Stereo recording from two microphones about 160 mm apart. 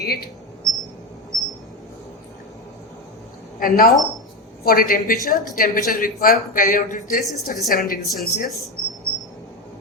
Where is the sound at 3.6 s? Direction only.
60° left (ahead or behind).